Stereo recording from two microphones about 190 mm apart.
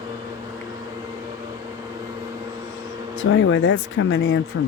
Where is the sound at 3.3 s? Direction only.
90° left.